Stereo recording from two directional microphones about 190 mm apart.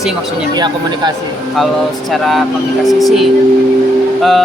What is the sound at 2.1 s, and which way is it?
Speech, centre (ahead or behind).